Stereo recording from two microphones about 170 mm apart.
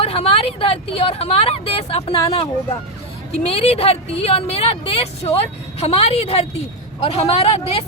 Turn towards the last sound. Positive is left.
turn(degrees=35)  # may be behind; listen again after turning